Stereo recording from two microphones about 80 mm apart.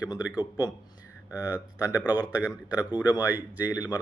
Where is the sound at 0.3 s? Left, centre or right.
Left.